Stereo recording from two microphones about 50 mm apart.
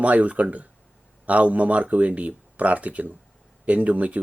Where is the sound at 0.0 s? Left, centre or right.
Right.